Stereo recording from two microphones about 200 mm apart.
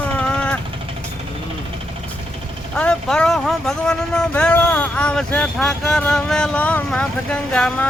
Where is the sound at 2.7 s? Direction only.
5° left (ahead or behind).